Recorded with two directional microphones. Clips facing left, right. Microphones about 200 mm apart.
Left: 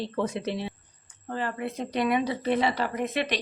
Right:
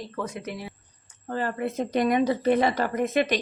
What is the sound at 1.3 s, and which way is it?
Speech, 45° right (ahead or behind).